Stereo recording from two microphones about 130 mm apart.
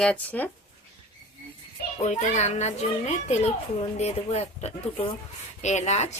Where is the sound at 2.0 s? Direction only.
60° left (ahead or behind).